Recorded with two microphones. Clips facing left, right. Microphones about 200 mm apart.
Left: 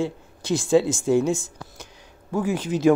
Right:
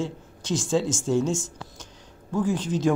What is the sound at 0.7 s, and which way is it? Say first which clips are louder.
Speech: left 5 dB; 60° left (ahead or behind).